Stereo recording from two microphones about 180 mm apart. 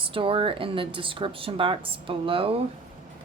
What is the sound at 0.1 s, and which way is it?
Speech, 30° right (ahead or behind).